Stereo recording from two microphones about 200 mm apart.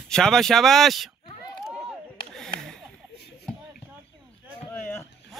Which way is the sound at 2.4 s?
Centre (ahead or behind).